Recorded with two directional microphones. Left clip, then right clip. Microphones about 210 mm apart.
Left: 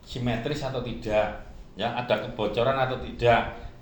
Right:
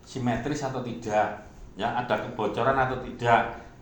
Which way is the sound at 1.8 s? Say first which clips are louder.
Left 1 dB; 35° left (ahead or behind).